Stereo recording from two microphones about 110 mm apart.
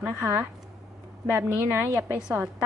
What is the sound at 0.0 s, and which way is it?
Speech, 20° right (ahead or behind).